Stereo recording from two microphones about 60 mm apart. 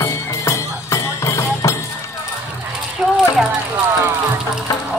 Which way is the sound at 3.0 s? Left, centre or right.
Centre.